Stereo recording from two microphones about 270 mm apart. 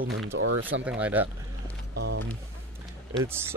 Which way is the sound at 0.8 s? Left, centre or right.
Centre.